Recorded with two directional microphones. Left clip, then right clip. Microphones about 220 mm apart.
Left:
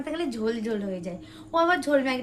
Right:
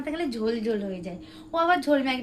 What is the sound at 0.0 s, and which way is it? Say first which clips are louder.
A woman's voice: even; 15° left (ahead or behind).